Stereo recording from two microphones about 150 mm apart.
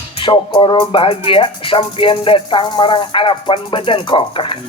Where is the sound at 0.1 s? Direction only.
35° left (ahead or behind).